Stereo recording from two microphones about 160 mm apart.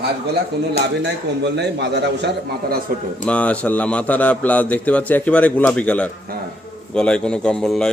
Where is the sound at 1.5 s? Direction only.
90° right.